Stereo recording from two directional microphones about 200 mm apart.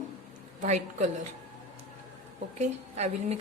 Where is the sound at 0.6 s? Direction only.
35° right (ahead or behind).